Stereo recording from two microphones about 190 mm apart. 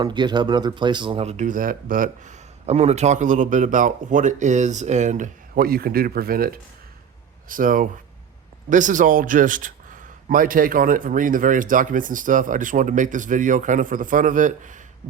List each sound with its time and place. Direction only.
0.0 s a man's voice: 25° right (ahead or behind); by 14.8 s 40° right (ahead or behind)